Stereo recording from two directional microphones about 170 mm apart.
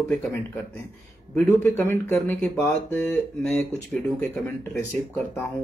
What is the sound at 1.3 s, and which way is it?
Speech, 15° left (ahead or behind).